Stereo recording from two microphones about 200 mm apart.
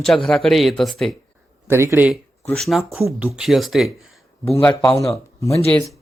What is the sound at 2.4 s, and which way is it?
Speech, centre (ahead or behind).